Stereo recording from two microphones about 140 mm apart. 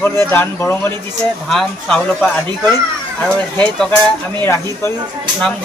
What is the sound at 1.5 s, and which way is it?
A man's voice, 5° left (ahead or behind).